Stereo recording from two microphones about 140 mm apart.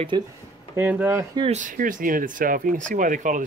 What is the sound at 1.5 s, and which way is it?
Speech, 70° right (ahead or behind).